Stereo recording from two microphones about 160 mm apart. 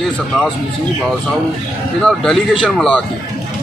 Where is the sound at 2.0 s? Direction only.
Centre (ahead or behind).